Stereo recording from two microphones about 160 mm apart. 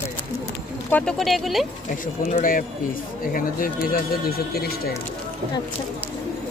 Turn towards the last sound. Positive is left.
turn(degrees=75)  # may be behind; listen again after turning